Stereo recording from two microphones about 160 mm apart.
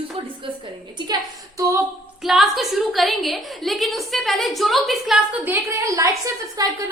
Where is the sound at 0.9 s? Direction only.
25° right (ahead or behind).